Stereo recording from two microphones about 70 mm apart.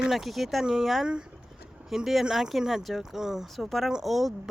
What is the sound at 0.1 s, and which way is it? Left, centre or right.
Speech, centre.